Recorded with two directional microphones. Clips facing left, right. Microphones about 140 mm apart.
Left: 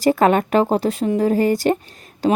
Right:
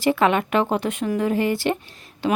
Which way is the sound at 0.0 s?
40° left (ahead or behind).